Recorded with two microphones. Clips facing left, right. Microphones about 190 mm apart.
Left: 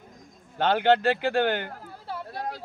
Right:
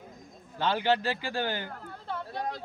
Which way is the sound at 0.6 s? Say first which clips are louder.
Left 6 dB; 60° left (ahead or behind).